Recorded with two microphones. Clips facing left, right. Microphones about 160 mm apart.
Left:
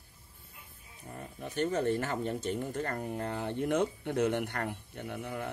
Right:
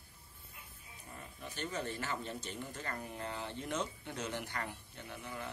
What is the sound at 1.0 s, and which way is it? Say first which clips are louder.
Speech: left 7 dB; 45° left (ahead or behind).